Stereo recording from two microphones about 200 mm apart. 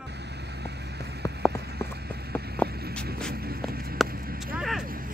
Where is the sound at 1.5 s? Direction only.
55° right (ahead or behind).